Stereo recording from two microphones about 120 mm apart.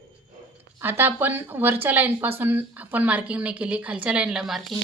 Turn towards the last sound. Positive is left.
turn(degrees=-5)  # may be behind; listen again after turning